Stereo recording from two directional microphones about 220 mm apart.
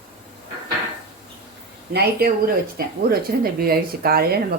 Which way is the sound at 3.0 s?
45° right (ahead or behind).